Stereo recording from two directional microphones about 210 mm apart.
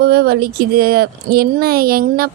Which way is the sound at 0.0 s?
50° right (ahead or behind).